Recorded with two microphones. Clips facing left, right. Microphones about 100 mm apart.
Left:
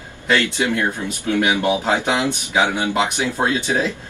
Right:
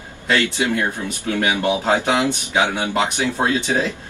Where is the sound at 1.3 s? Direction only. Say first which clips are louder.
Left 2 dB; 15° left (ahead or behind).